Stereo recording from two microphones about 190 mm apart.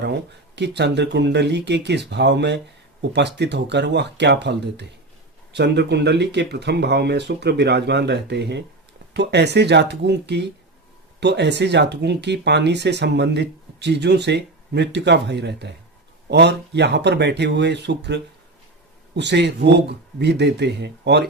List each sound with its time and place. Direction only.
0.0 s speech: 65° right (ahead or behind)